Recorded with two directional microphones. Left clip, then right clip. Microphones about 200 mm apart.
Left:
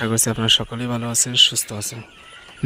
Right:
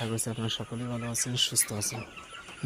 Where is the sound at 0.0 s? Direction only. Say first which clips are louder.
Left 13 dB; 35° left (ahead or behind).